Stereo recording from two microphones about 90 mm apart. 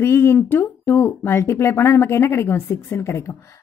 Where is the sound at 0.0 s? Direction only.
30° left (ahead or behind).